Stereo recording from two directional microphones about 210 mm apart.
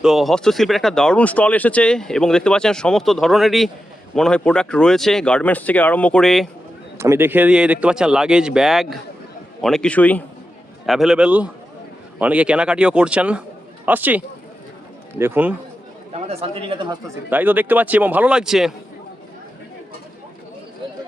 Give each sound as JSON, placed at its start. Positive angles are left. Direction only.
{"t": 0.0, "sound": "speech", "side_deg": 0}
{"t": 7.0, "sound": "speech", "side_deg": -10}
{"t": 15.2, "sound": "speech", "side_deg": -10}
{"t": 16.1, "sound": "speech", "side_deg": -30}
{"t": 17.2, "sound": "speech", "side_deg": -10}